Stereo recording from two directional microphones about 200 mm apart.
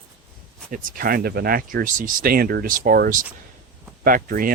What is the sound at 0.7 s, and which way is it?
Speech, 45° right (ahead or behind).